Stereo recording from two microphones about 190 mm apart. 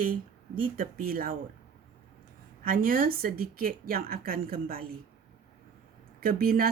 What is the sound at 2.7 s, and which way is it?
A woman's voice, 50° right (ahead or behind).